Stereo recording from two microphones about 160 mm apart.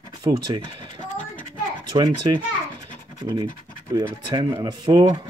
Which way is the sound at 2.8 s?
20° right (ahead or behind).